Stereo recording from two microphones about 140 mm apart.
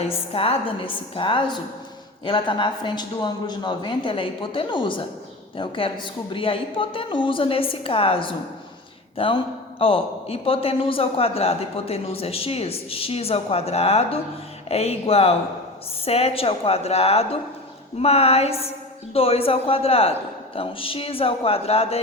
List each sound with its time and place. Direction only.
0.0 s a man's voice: 45° left (ahead or behind)